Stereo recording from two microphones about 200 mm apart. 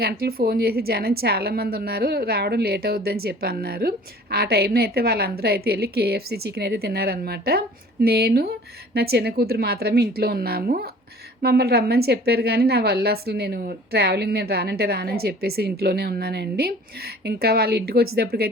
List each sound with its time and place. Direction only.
0.0 s a woman's voice: 50° right (ahead or behind)